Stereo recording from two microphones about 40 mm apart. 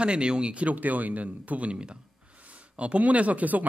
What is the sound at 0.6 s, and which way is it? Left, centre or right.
Speech, right.